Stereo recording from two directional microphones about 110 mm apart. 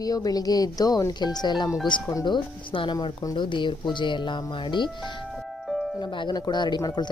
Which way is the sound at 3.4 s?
45° left (ahead or behind).